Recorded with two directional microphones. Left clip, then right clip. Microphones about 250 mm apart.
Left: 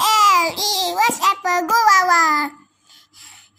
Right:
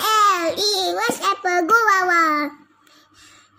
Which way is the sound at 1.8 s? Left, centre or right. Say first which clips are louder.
Left 3 dB; left.